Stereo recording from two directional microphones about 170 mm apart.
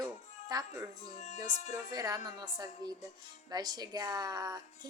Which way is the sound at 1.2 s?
40° left (ahead or behind).